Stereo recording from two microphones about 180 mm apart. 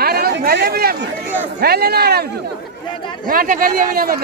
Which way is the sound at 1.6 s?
60° right (ahead or behind).